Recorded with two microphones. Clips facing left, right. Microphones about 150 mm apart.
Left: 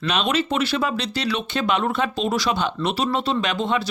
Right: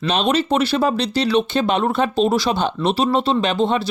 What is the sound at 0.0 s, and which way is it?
Speech, 30° right (ahead or behind).